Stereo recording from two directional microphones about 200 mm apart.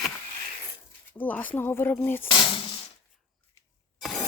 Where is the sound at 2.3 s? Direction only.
25° left (ahead or behind).